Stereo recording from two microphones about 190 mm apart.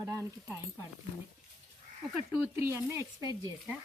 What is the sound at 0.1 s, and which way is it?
Speech, 15° right (ahead or behind).